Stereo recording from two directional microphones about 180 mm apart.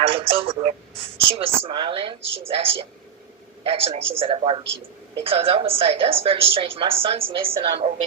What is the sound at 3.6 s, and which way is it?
A woman's voice, 30° right (ahead or behind).